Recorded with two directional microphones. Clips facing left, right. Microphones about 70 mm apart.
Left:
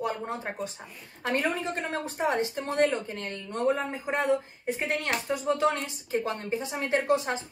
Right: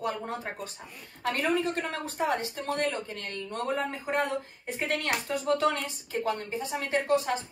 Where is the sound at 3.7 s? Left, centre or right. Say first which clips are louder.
Even; centre.